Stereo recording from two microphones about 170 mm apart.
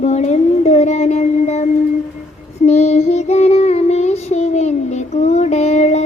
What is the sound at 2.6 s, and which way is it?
Female singing, 40° left (ahead or behind).